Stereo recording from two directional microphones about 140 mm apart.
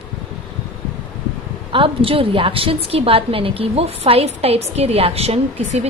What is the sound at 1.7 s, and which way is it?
A woman's voice, 40° right (ahead or behind).